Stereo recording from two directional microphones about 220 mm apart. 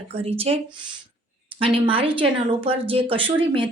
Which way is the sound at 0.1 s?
25° right (ahead or behind).